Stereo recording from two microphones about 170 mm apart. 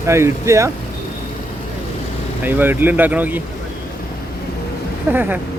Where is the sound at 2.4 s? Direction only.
10° right (ahead or behind).